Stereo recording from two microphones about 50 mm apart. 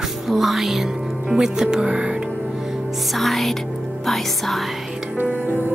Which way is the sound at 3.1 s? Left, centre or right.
Centre.